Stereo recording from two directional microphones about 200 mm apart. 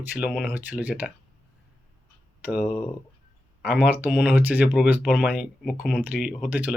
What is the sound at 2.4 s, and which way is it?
Speech, 5° right (ahead or behind).